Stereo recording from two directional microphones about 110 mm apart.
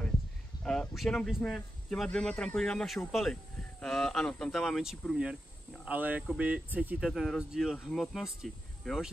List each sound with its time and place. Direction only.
0.7 s speech: 5° left (ahead or behind); by 7.1 s 15° right (ahead or behind)
7.1 s speech: centre (ahead or behind)